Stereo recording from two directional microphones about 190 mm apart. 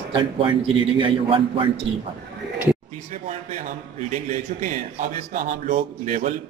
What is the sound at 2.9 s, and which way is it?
Speech, 40° right (ahead or behind).